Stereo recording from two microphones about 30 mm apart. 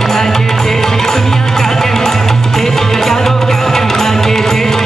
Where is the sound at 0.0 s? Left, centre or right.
Centre.